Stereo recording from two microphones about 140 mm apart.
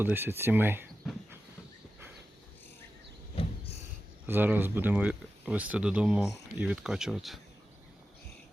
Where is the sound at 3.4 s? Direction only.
40° left (ahead or behind).